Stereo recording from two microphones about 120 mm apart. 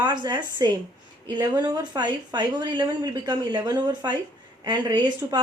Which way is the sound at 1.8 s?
40° right (ahead or behind).